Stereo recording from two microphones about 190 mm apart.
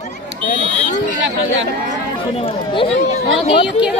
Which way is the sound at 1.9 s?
30° left (ahead or behind).